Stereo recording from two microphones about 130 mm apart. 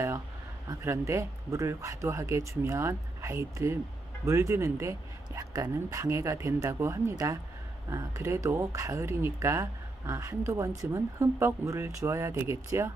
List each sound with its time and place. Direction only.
0.7 s speech: 20° right (ahead or behind)